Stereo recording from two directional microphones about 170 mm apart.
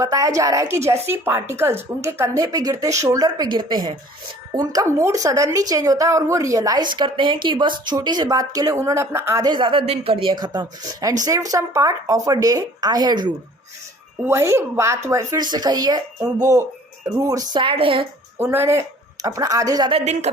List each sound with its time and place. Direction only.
0.0 s a woman's voice: 20° right (ahead or behind)
18.3 s a woman's voice: 15° right (ahead or behind)
20.3 s speech: 35° right (ahead or behind)